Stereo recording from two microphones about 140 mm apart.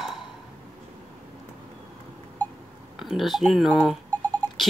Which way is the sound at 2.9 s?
Centre (ahead or behind).